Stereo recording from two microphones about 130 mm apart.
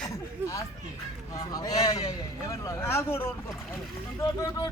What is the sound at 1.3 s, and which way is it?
A man's voice, 30° left (ahead or behind).